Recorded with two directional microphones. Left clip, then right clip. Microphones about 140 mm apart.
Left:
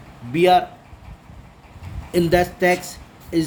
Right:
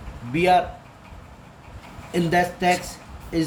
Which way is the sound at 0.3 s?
35° left (ahead or behind).